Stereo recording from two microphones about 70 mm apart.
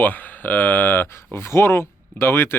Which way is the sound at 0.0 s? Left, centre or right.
Left.